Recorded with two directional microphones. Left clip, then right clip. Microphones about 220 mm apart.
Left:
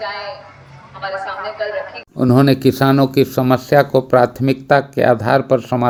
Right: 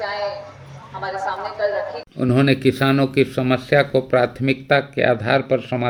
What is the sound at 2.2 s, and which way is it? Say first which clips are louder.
Speech: left 5 dB; 20° left (ahead or behind).